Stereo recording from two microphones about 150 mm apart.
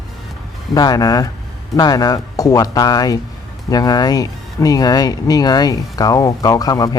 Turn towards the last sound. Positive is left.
turn(degrees=25)  # may be behind; listen again after turning